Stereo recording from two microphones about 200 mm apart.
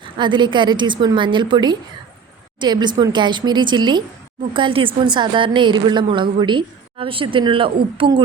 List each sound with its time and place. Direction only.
0.0 s a woman's voice: 25° right (ahead or behind)